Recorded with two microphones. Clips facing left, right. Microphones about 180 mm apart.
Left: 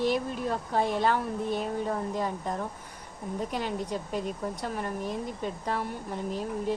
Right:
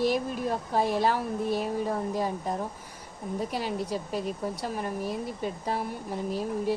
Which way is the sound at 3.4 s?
10° right (ahead or behind).